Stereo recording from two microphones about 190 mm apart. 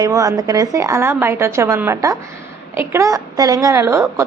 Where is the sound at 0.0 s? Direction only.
20° right (ahead or behind).